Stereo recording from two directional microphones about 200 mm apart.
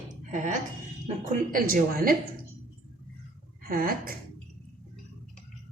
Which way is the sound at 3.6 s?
45° right (ahead or behind).